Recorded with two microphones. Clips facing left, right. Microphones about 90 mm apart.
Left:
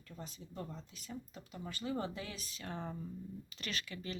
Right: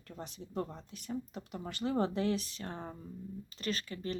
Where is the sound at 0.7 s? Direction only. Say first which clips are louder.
Right 7 dB; 55° right (ahead or behind).